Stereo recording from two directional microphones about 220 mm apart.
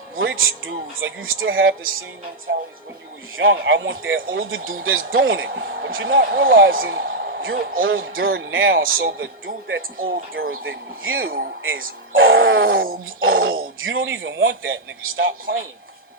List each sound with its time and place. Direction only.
0.2 s a man's voice: 65° right (ahead or behind)
8.8 s a man's voice: 40° right (ahead or behind)
9.1 s a man's voice: 60° right (ahead or behind)